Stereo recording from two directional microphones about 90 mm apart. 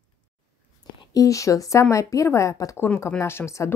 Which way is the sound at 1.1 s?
40° left (ahead or behind).